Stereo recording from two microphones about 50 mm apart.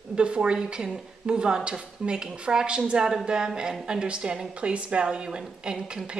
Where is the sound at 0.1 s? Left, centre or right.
Right.